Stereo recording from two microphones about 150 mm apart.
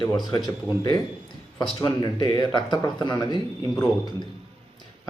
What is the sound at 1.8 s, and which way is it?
Speech, 30° left (ahead or behind).